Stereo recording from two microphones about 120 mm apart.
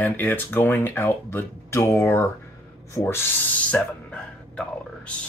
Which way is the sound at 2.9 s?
20° left (ahead or behind).